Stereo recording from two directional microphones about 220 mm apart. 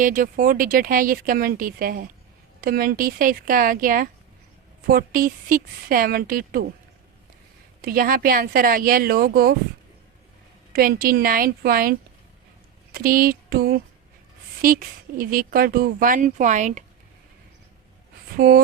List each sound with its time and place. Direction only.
0.0 s speech: 35° right (ahead or behind)
7.8 s speech: 40° right (ahead or behind)
10.7 s speech: 40° right (ahead or behind)
12.9 s a sound: 40° right (ahead or behind)
14.6 s speech: 40° right (ahead or behind)
18.3 s speech: 40° right (ahead or behind)